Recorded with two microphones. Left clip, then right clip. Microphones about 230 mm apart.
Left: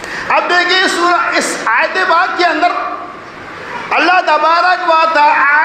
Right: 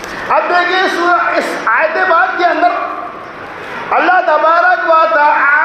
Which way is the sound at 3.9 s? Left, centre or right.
Left.